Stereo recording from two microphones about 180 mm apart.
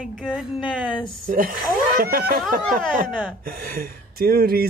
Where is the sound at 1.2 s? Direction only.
50° right (ahead or behind).